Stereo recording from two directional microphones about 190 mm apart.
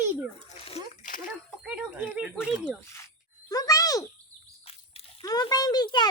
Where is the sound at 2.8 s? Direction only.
15° left (ahead or behind).